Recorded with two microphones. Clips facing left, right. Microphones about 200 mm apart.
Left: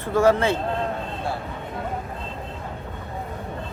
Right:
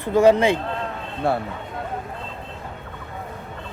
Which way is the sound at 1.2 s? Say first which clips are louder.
Right 9 dB; 60° right (ahead or behind).